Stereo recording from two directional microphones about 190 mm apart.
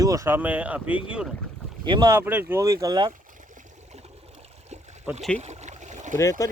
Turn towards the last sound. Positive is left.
turn(degrees=15)  # may be behind; listen again after turning